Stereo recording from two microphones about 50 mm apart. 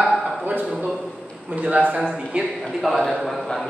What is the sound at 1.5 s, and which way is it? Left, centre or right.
A man's voice, right.